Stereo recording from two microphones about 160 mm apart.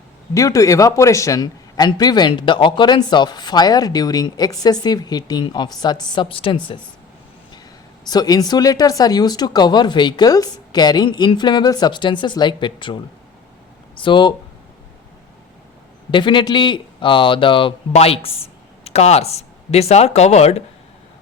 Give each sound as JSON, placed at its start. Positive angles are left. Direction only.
{"t": 0.3, "sound": "a man's voice", "side_deg": 20}
{"t": 8.0, "sound": "a man's voice", "side_deg": 25}
{"t": 16.1, "sound": "speech", "side_deg": 30}